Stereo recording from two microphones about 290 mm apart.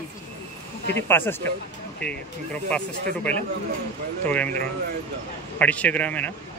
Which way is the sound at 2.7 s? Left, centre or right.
Centre.